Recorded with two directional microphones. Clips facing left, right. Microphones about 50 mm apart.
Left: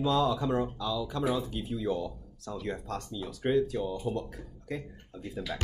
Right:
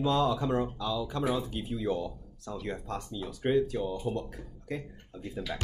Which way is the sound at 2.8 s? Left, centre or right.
Centre.